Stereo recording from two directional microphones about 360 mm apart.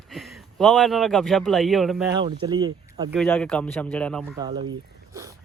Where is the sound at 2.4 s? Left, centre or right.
Centre.